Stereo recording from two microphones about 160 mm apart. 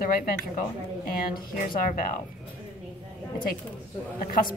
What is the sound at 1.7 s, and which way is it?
Speech, 60° left (ahead or behind).